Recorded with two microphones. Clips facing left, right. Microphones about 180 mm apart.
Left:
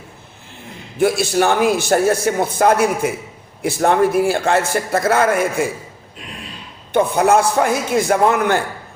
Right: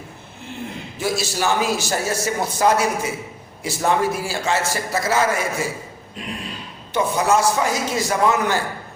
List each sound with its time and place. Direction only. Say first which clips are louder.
0.9 s a man's voice: left 8 dB; 55° left (ahead or behind)
6.9 s a man's voice: left 5 dB; 55° left (ahead or behind)